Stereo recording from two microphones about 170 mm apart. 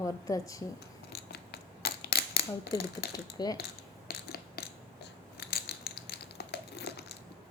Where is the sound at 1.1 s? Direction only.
70° left (ahead or behind).